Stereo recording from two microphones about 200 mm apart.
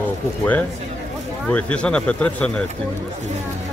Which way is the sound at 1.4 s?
5° left (ahead or behind).